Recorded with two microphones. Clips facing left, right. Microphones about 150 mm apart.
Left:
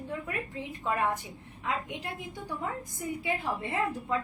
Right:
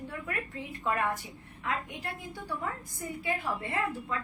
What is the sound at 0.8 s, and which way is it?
A woman's voice, 20° left (ahead or behind).